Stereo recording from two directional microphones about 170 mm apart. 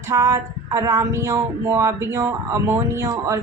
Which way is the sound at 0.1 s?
20° right (ahead or behind).